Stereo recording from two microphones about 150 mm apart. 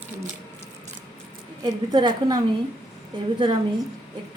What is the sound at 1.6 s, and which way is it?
Speech, 30° right (ahead or behind).